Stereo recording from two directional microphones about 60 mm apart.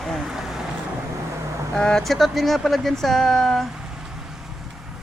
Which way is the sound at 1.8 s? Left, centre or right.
Centre.